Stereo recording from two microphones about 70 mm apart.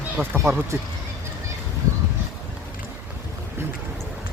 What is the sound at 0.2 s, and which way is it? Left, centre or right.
Speech, right.